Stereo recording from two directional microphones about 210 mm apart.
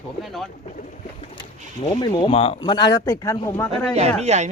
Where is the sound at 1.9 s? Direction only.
20° left (ahead or behind).